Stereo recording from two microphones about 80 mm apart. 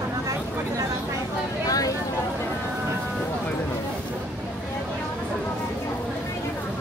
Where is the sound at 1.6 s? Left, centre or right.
Left.